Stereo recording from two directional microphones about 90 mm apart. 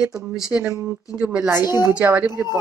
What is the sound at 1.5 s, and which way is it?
Speech, 25° right (ahead or behind).